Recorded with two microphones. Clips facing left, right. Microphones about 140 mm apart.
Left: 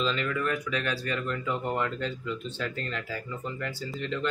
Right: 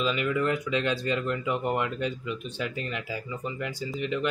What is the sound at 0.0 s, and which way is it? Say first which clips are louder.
Speech: right 2 dB; 15° right (ahead or behind).